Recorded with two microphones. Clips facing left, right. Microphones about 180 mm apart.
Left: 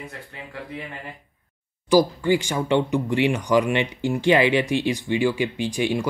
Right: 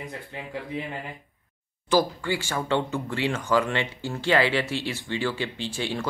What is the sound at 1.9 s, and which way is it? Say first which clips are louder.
Speech: left 6 dB; 15° left (ahead or behind).